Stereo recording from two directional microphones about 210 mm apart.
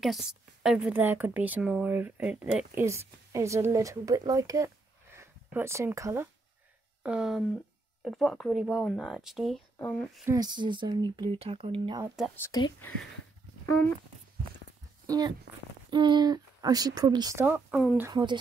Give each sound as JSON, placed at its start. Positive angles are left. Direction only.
{"t": 0.0, "sound": "a woman's voice", "side_deg": 0}
{"t": 10.2, "sound": "speech", "side_deg": -20}
{"t": 12.4, "sound": "speech", "side_deg": 15}
{"t": 15.0, "sound": "a woman's voice", "side_deg": -20}
{"t": 17.6, "sound": "speech", "side_deg": 0}
{"t": 18.0, "sound": "speech", "side_deg": -20}